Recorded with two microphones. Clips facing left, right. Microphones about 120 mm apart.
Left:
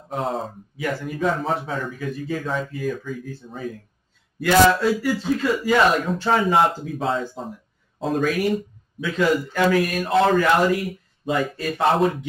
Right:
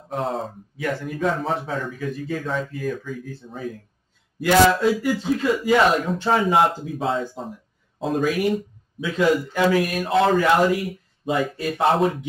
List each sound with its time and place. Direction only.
0.1 s speech: centre (ahead or behind)
4.4 s speech: 20° right (ahead or behind)
6.3 s speech: 5° right (ahead or behind)